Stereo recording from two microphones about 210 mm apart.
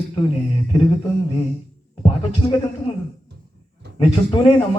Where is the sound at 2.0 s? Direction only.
20° left (ahead or behind).